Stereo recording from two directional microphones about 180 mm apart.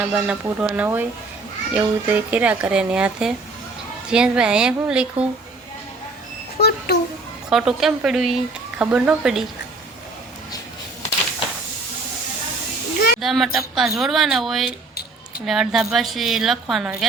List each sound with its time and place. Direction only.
0.0 s a woman's voice: 10° right (ahead or behind)
6.6 s a child's voice: 60° left (ahead or behind)
7.5 s a woman's voice: centre (ahead or behind)
13.2 s a woman's voice: centre (ahead or behind)